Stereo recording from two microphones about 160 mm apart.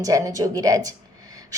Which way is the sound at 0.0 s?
20° right (ahead or behind).